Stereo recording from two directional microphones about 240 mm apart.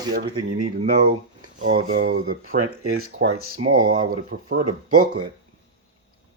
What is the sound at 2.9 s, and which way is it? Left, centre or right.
Speech, right.